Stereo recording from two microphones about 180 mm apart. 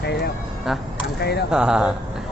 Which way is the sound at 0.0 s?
65° left (ahead or behind).